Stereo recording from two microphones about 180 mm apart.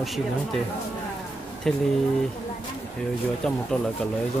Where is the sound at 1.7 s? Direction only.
5° left (ahead or behind).